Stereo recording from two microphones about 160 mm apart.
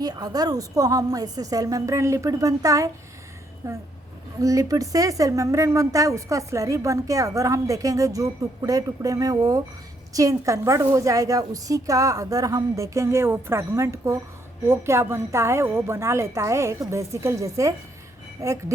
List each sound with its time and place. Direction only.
0.0 s a woman's voice: 25° right (ahead or behind)